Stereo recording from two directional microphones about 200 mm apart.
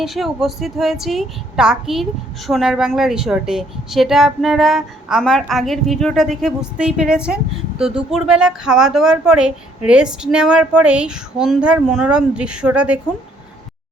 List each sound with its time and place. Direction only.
0.0 s speech: centre (ahead or behind)